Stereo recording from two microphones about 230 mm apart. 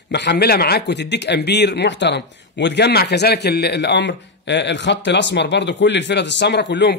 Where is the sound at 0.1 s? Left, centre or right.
Left.